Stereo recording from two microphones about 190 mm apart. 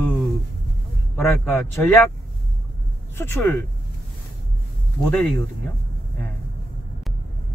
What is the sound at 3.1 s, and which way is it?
Speech, 10° left (ahead or behind).